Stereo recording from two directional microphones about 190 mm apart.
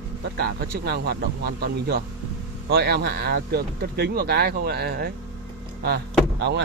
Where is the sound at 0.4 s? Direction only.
55° right (ahead or behind).